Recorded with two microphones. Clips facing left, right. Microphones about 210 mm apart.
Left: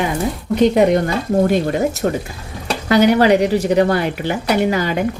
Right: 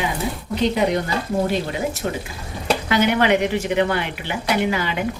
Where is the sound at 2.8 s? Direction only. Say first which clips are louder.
Left 7 dB; 40° left (ahead or behind).